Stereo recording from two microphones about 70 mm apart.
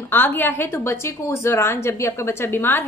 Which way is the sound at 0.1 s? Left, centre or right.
Left.